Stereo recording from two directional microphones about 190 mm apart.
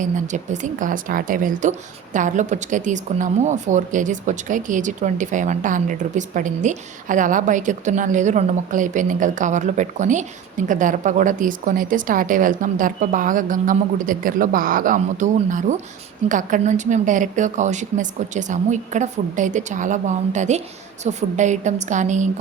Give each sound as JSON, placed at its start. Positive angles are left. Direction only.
{"t": 0.0, "sound": "a woman's voice", "side_deg": -40}